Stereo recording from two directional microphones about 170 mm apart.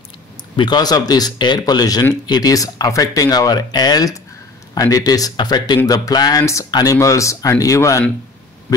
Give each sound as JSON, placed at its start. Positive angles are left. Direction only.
{"t": 0.6, "sound": "speech", "side_deg": 25}